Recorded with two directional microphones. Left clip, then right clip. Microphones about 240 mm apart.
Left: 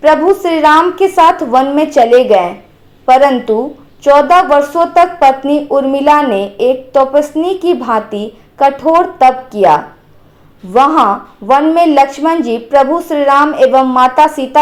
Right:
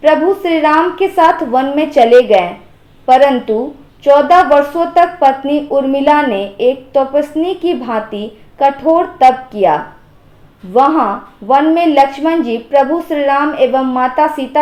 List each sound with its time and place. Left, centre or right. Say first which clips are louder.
0.0 s speech: left 2 dB; left
11.5 s speech: left 2 dB; left